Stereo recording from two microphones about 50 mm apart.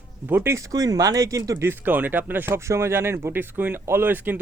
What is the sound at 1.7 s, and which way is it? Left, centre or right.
Speech, right.